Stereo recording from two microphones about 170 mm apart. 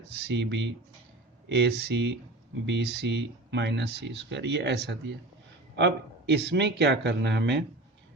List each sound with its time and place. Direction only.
0.3 s speech: 90° right